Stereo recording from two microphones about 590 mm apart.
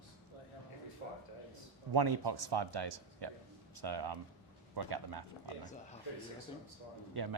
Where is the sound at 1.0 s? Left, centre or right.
Left.